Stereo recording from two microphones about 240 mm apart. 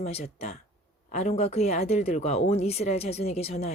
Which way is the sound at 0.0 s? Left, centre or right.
Left.